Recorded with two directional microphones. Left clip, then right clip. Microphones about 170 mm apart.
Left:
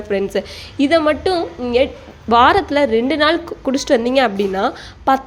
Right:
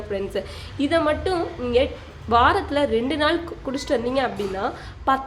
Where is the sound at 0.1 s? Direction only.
45° left (ahead or behind).